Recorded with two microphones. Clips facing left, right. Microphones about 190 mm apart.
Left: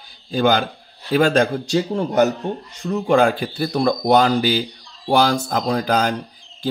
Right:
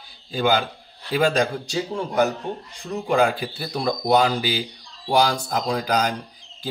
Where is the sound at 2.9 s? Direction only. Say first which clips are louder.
Left 4 dB; 50° left (ahead or behind).